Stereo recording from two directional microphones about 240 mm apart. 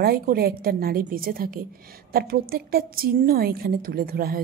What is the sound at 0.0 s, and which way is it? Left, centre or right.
A woman's voice, right.